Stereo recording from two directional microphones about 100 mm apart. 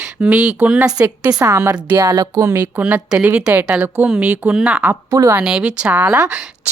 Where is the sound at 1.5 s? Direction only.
20° right (ahead or behind).